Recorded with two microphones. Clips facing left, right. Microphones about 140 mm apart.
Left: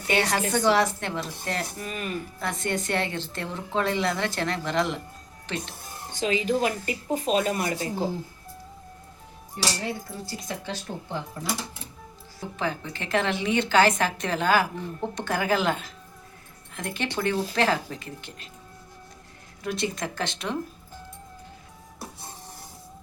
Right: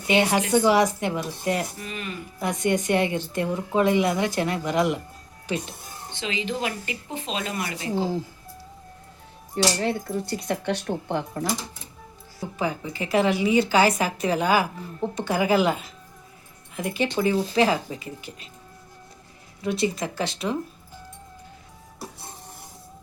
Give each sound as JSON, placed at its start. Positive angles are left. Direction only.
{"t": 0.1, "sound": "a woman's voice", "side_deg": -15}
{"t": 1.8, "sound": "speech", "side_deg": 45}
{"t": 2.4, "sound": "a woman's voice", "side_deg": -15}
{"t": 6.1, "sound": "speech", "side_deg": 45}
{"t": 9.8, "sound": "speech", "side_deg": -65}
{"t": 12.5, "sound": "a woman's voice", "side_deg": -10}
{"t": 19.6, "sound": "speech", "side_deg": 0}